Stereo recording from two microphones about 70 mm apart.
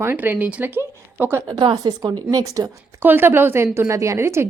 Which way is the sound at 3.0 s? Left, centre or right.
Right.